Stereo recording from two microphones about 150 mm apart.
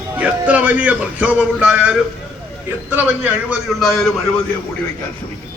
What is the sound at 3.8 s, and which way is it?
Speech, centre (ahead or behind).